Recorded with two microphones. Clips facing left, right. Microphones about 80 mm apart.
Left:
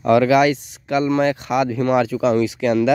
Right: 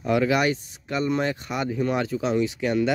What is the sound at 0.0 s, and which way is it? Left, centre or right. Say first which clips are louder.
Speech: left 8 dB; left.